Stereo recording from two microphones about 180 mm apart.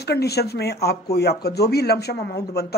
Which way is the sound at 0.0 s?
65° left (ahead or behind).